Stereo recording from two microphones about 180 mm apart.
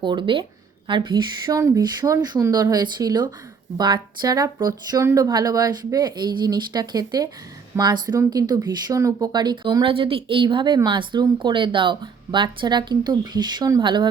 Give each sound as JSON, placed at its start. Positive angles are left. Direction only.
{"t": 0.0, "sound": "speech", "side_deg": -25}